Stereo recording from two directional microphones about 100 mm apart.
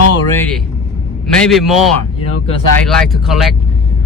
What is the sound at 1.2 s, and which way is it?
A man's voice, 5° left (ahead or behind).